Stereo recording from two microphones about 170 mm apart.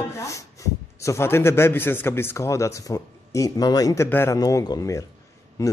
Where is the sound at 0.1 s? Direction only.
20° left (ahead or behind).